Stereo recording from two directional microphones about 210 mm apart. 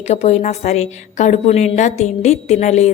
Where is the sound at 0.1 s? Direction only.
30° left (ahead or behind).